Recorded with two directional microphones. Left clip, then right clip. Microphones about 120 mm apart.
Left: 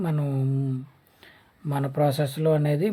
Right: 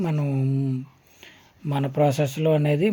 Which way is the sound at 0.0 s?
25° right (ahead or behind).